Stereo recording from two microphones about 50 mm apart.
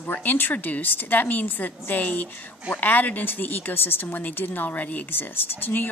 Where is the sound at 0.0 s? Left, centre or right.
Left.